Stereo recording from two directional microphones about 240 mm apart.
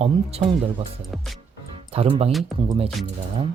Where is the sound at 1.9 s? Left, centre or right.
Right.